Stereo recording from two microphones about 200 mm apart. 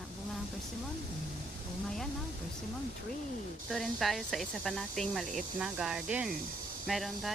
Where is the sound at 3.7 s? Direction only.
Centre (ahead or behind).